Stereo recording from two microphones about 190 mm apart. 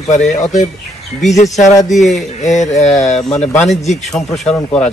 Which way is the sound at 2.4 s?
40° left (ahead or behind).